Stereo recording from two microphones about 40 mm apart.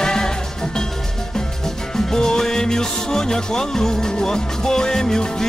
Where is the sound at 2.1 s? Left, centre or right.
Centre.